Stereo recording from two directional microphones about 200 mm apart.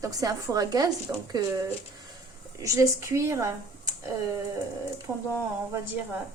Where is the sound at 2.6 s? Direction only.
15° right (ahead or behind).